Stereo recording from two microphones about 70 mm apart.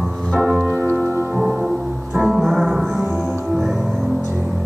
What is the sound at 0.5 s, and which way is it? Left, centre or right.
Organ, right.